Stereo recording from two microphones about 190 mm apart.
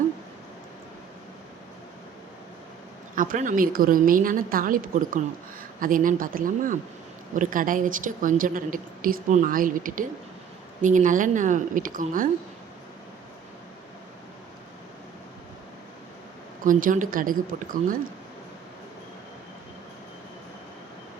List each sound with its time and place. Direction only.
3.2 s a woman's voice: 45° right (ahead or behind)
16.6 s a woman's voice: 45° right (ahead or behind)